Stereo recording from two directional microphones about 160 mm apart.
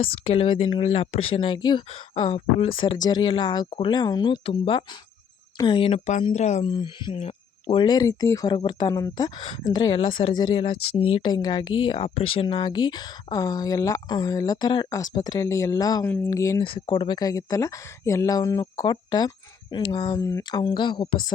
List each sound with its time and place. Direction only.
0.3 s speech: 35° left (ahead or behind)
6.7 s speech: 30° left (ahead or behind)
16.0 s speech: 15° left (ahead or behind)
16.6 s speech: 35° left (ahead or behind)